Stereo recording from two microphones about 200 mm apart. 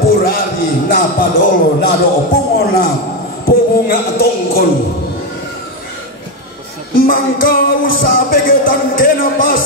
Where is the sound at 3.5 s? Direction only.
50° left (ahead or behind).